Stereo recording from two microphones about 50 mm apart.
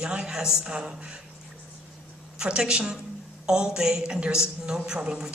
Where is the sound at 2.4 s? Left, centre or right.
Centre.